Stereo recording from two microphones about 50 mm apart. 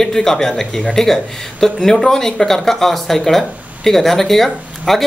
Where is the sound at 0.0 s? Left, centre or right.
Centre.